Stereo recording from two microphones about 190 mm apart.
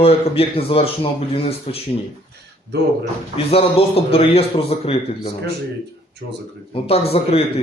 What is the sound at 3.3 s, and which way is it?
A man's voice, 30° left (ahead or behind).